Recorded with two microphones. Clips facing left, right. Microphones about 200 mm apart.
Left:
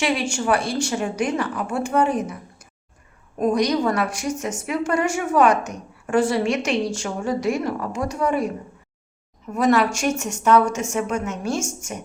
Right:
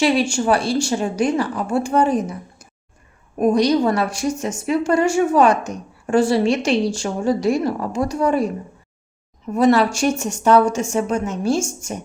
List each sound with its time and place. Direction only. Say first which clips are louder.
0.0 s a woman's voice: right 5 dB; 30° right (ahead or behind)
9.6 s a woman's voice: right 3 dB; 30° right (ahead or behind)